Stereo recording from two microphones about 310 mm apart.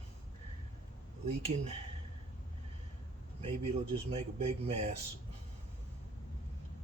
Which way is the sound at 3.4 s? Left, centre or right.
Centre.